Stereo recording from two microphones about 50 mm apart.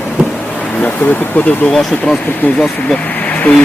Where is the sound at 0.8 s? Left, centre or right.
Left.